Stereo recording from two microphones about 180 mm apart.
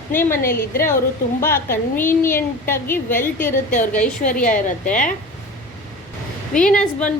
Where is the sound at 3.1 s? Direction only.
45° left (ahead or behind).